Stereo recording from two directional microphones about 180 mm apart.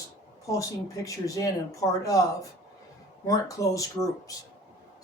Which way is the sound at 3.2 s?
20° left (ahead or behind).